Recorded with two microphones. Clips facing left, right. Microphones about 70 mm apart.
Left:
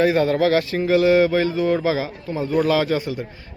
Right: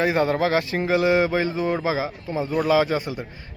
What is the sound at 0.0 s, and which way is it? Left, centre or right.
A man's voice, right.